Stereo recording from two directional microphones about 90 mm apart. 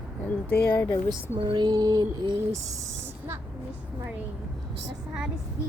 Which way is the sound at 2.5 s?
35° right (ahead or behind).